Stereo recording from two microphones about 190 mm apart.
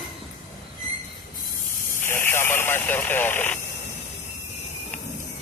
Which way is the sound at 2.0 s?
10° left (ahead or behind).